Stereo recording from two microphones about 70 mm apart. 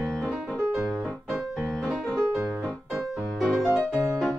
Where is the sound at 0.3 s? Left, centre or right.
Centre.